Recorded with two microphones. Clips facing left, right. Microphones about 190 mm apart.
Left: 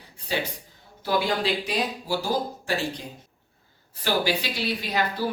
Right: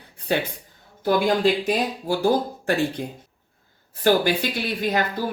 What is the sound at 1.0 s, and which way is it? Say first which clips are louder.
Speech: right 5 dB; 50° right (ahead or behind).